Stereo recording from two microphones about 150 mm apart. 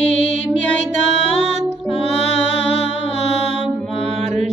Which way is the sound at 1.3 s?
50° right (ahead or behind).